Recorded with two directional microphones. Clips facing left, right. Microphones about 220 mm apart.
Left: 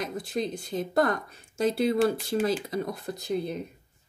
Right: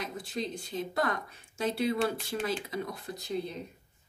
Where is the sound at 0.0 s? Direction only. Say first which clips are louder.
Left 5 dB; 45° left (ahead or behind).